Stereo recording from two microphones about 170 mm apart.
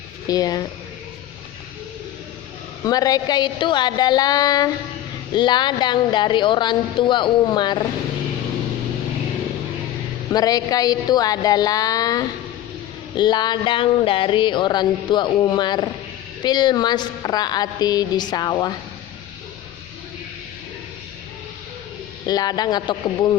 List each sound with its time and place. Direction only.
0.3 s speech: 20° left (ahead or behind)
2.8 s speech: 20° left (ahead or behind)
10.3 s speech: 20° left (ahead or behind)
22.3 s speech: 25° left (ahead or behind)